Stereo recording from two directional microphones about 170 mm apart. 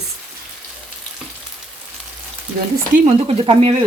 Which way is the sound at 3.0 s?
30° right (ahead or behind).